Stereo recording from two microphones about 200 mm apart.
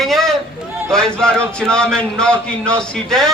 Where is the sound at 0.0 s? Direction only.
Centre (ahead or behind).